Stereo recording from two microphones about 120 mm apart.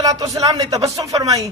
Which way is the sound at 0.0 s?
30° right (ahead or behind).